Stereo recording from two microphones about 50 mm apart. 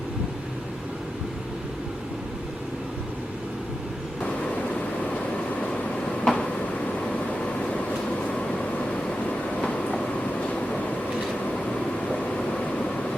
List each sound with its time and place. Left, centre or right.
6.2 s a sound: centre
9.6 s train: left
12.1 s vehicle: centre